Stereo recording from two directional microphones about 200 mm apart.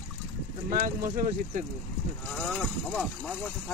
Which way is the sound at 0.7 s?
40° right (ahead or behind).